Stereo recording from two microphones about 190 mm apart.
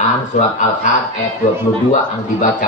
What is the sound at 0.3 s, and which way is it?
Speech, 40° left (ahead or behind).